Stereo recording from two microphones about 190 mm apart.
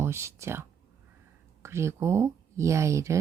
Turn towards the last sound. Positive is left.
turn(degrees=-15)  # may be behind; listen again after turning